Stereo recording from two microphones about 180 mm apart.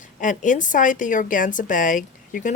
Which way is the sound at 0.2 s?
45° left (ahead or behind).